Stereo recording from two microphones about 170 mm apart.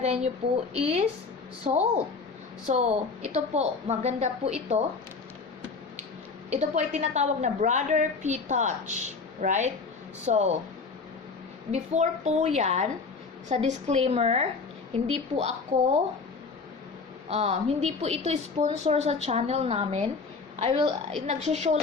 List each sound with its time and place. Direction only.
0.0 s a woman's voice: 40° right (ahead or behind)
6.5 s a woman's voice: 40° right (ahead or behind)
11.7 s a woman's voice: 40° right (ahead or behind)
17.2 s a woman's voice: 40° right (ahead or behind)